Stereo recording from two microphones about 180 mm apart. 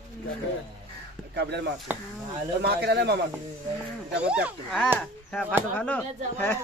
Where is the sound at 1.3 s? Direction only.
70° right (ahead or behind).